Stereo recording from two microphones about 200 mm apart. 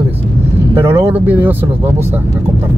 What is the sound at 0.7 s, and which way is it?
Speech, 10° right (ahead or behind).